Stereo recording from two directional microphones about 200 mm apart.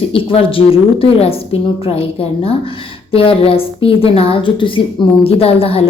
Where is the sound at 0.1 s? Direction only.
25° left (ahead or behind).